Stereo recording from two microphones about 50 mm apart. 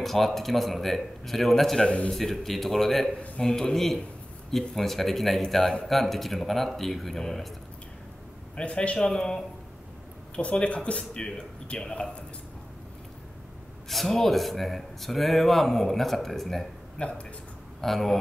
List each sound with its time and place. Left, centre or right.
0.0 s speech: centre
1.8 s speech: centre
2.1 s speech: centre
8.5 s speech: left
13.8 s speech: centre
17.0 s speech: left
17.7 s speech: centre